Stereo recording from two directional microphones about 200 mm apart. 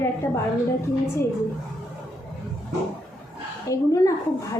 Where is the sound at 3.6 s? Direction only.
15° left (ahead or behind).